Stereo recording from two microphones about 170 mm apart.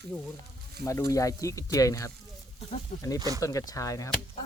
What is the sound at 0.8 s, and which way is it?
Speech, 20° left (ahead or behind).